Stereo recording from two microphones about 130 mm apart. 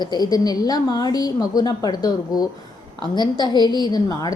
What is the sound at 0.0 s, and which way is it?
A woman's voice, 30° left (ahead or behind).